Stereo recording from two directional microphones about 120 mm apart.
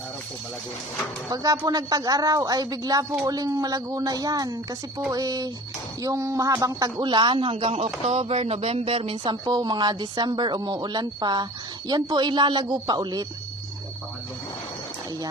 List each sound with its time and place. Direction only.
1.3 s speech: 30° right (ahead or behind)